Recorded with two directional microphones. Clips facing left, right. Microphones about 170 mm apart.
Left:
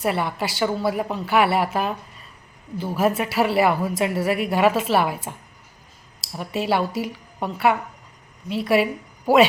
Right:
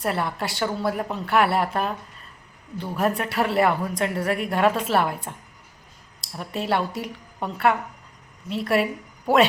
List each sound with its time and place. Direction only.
0.0 s a woman's voice: centre (ahead or behind)